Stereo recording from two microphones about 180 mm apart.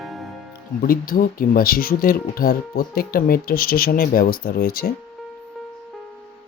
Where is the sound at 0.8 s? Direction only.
55° left (ahead or behind).